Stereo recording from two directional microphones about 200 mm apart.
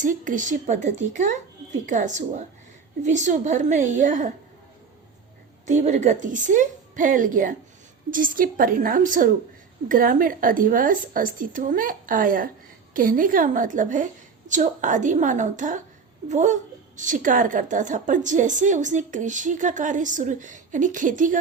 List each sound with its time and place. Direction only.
0.0 s a woman's voice: 40° right (ahead or behind)
5.6 s a woman's voice: 40° right (ahead or behind)